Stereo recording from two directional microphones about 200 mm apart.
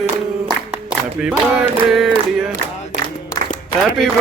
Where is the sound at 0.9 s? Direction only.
5° right (ahead or behind).